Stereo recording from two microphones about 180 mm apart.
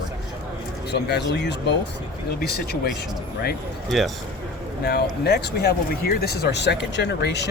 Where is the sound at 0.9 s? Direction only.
70° left (ahead or behind).